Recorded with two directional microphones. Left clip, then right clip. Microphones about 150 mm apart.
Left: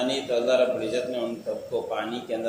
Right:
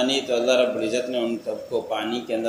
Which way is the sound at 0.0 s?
30° right (ahead or behind).